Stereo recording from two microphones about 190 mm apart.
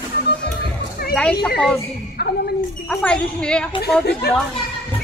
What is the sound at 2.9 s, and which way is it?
Speech, 5° left (ahead or behind).